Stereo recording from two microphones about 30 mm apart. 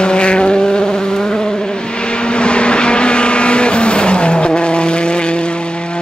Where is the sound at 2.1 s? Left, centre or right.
Left.